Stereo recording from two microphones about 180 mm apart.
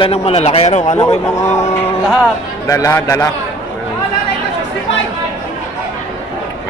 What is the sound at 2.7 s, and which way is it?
Speech, 15° left (ahead or behind).